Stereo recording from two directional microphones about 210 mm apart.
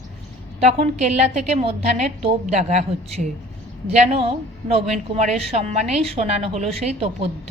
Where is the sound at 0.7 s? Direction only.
30° right (ahead or behind).